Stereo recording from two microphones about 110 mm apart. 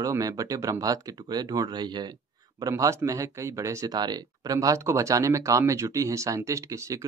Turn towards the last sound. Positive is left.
turn(degrees=-30)  # may be behind; listen again after turning